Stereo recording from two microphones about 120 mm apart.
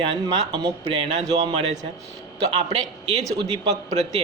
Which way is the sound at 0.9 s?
50° right (ahead or behind).